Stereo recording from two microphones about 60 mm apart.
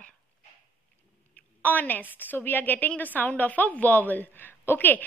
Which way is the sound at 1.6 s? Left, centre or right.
Left.